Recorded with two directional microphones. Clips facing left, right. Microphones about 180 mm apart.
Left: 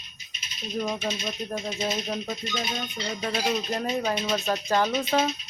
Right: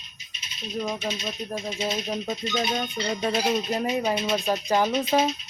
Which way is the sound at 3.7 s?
10° right (ahead or behind).